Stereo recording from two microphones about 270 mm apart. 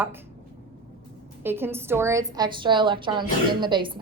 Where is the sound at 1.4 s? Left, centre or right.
Centre.